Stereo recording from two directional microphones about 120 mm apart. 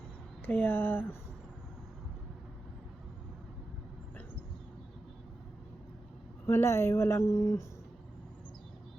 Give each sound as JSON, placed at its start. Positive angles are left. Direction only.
{"t": 0.4, "sound": "speech", "side_deg": 15}
{"t": 6.4, "sound": "a woman's voice", "side_deg": 20}